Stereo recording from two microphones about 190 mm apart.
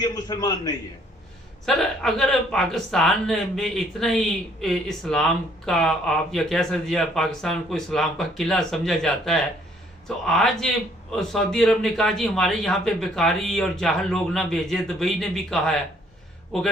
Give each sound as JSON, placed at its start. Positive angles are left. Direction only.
{"t": 0.0, "sound": "a man's voice", "side_deg": 20}
{"t": 1.6, "sound": "speech", "side_deg": 0}